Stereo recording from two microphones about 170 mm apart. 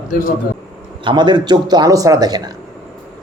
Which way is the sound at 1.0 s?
30° right (ahead or behind).